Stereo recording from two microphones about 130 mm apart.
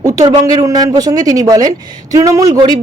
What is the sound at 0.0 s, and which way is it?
Speech, 30° right (ahead or behind).